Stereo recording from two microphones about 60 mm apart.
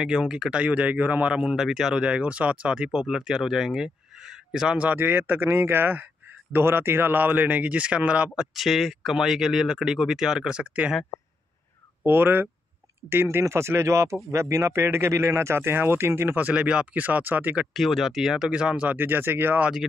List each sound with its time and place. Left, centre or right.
0.0 s speech: centre
4.9 s a man's voice: right; by 8.5 s centre
8.5 s speech: centre; by 10.9 s right
12.1 s a man's voice: right
13.4 s speech: right
16.3 s speech: right
17.7 s speech: centre
18.9 s a man's voice: right